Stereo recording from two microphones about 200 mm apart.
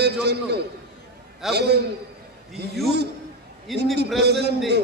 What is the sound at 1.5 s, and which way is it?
A man's voice, 55° right (ahead or behind).